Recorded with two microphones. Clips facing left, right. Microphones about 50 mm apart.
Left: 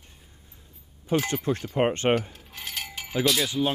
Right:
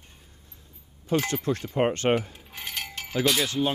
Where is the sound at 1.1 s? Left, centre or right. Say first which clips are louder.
Even; left.